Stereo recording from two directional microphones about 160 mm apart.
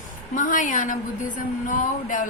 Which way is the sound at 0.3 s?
55° left (ahead or behind).